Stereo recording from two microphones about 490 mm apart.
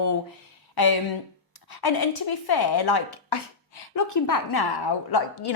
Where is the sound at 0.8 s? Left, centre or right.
Left.